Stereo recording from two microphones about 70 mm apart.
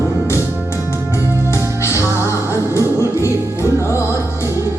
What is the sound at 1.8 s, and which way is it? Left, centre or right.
Music, left.